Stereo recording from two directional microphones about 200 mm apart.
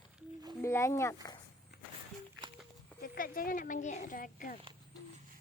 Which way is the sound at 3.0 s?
45° left (ahead or behind).